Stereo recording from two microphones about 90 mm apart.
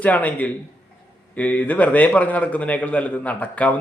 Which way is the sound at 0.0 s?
15° left (ahead or behind).